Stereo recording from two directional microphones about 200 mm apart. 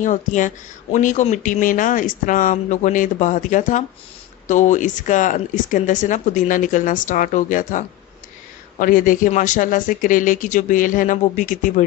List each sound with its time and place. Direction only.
0.0 s speech: 40° left (ahead or behind)